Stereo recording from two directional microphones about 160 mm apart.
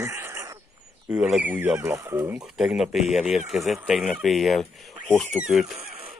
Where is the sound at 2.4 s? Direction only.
Centre (ahead or behind).